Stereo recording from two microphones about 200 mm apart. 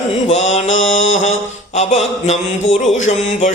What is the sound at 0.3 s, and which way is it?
Mantra, 35° left (ahead or behind).